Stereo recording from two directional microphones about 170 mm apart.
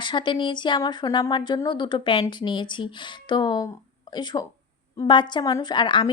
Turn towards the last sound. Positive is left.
turn(degrees=30)  # may be behind; listen again after turning